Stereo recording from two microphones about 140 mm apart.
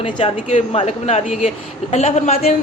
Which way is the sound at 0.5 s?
50° left (ahead or behind).